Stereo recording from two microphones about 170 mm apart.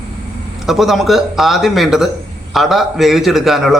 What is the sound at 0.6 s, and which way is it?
A man's voice, centre (ahead or behind).